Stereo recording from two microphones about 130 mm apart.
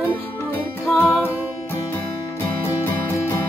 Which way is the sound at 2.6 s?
15° left (ahead or behind).